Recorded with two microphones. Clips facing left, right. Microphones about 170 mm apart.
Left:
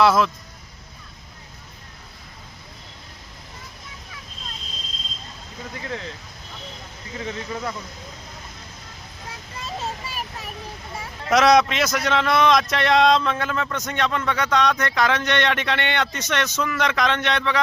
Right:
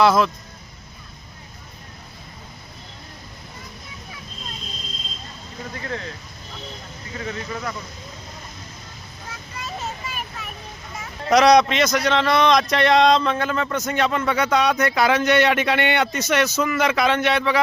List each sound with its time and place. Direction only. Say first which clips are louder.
0.0 s speech: right 1 dB; centre (ahead or behind)
7.3 s speech: even; 20° left (ahead or behind)
9.6 s a sound: left 1 dB; 30° left (ahead or behind)
11.3 s speech: right 2 dB; centre (ahead or behind)